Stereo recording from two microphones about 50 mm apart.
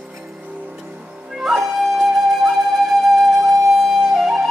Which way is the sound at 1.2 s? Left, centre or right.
Centre.